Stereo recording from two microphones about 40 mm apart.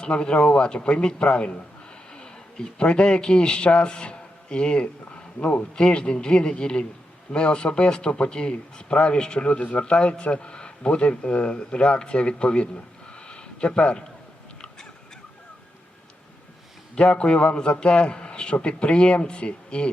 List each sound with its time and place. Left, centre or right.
0.0 s a man's voice: left
14.6 s a sound: centre
16.9 s a man's voice: left